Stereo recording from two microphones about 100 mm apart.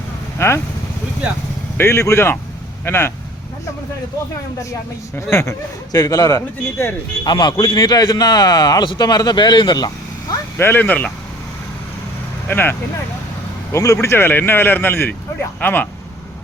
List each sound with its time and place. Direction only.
0.3 s speech: 25° left (ahead or behind)
1.8 s speech: 30° left (ahead or behind)
5.1 s speech: 30° left (ahead or behind)
7.3 s speech: 45° left (ahead or behind)
10.6 s speech: 20° left (ahead or behind)
12.5 s speech: 20° left (ahead or behind)
13.7 s speech: 30° left (ahead or behind)